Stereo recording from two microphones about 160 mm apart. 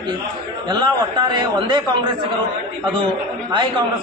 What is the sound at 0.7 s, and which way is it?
A man's voice, 25° right (ahead or behind).